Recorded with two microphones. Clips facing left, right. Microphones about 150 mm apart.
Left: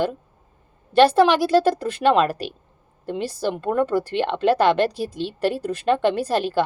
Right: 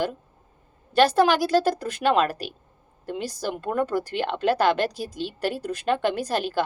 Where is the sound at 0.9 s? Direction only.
Centre (ahead or behind).